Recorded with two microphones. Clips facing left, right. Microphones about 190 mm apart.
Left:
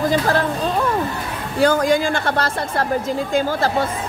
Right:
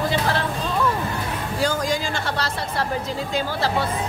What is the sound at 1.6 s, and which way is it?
A man's voice, 60° left (ahead or behind).